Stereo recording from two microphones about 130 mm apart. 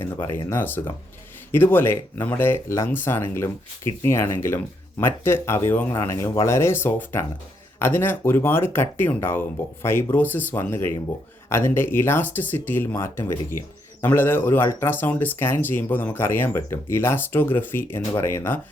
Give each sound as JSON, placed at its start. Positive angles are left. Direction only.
{"t": 0.0, "sound": "speech", "side_deg": 20}